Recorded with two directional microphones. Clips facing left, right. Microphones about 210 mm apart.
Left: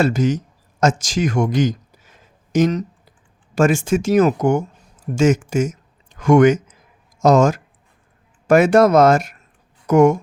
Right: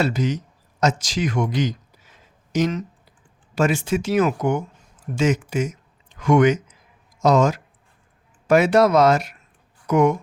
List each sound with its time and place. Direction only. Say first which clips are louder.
0.0 s speech: left 5 dB; 45° left (ahead or behind)